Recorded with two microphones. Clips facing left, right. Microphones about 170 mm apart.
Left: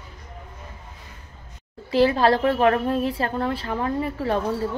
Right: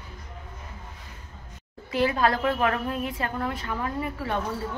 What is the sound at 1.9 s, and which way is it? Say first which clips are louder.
A woman's voice: left 6 dB; 30° left (ahead or behind).